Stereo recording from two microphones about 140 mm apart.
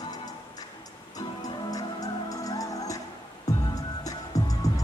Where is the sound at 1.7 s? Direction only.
25° left (ahead or behind).